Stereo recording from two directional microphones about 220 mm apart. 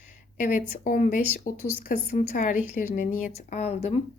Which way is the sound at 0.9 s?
35° left (ahead or behind).